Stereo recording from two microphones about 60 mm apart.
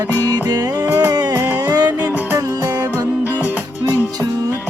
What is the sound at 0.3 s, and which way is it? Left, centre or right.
Music, right.